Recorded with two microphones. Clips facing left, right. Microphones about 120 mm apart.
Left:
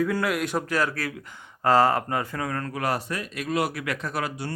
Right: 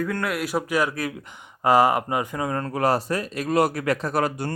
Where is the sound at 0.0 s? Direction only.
Centre (ahead or behind).